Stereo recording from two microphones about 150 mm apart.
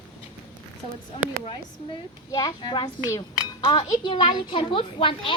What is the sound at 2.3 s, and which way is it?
A child's voice, 25° left (ahead or behind).